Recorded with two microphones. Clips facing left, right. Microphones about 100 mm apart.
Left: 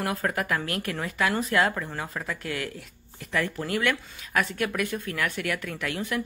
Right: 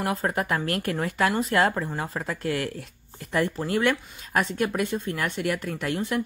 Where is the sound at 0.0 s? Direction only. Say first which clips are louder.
Right 2 dB; 25° right (ahead or behind).